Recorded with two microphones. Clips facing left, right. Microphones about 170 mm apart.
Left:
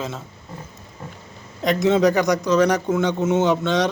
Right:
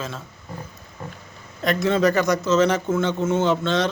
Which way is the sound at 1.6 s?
20° left (ahead or behind).